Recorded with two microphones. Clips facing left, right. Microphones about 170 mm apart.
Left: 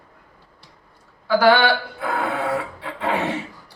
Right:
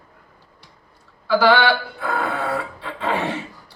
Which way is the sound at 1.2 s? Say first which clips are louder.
Even; 15° left (ahead or behind).